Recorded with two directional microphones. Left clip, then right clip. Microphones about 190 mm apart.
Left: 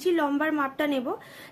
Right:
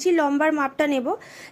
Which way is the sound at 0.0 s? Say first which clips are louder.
Right 5 dB; 25° right (ahead or behind).